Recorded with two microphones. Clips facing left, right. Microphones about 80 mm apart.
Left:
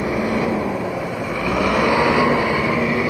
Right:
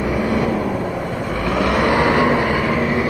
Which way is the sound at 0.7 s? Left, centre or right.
Right.